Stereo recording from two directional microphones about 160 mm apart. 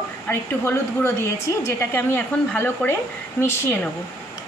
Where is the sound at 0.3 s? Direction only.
15° left (ahead or behind).